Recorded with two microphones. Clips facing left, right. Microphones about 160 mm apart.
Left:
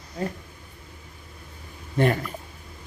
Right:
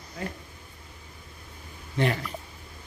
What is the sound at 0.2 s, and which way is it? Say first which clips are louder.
Speech: left 6 dB; 35° left (ahead or behind).